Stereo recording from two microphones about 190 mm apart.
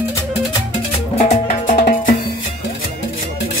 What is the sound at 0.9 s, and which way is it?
Music, 35° left (ahead or behind).